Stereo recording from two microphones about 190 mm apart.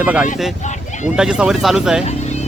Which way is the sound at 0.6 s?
40° left (ahead or behind).